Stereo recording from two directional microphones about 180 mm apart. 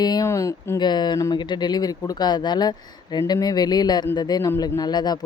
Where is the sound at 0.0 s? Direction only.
20° left (ahead or behind).